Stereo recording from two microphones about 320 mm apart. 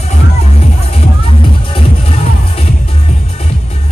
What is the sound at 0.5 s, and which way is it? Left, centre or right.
Music, centre.